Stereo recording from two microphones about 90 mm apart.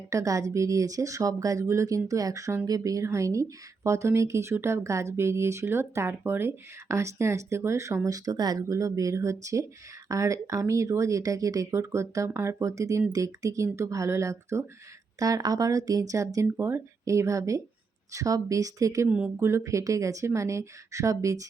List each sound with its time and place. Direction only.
0.1 s speech: 40° right (ahead or behind)
15.2 s speech: 40° right (ahead or behind)
19.0 s speech: 10° right (ahead or behind)
19.4 s speech: 30° right (ahead or behind)